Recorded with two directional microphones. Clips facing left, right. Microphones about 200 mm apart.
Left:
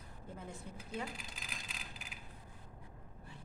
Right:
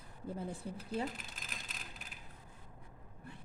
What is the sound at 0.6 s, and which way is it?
Speech, 35° right (ahead or behind).